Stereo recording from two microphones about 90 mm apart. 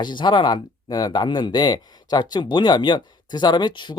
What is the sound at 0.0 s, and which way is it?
Speech, 60° left (ahead or behind).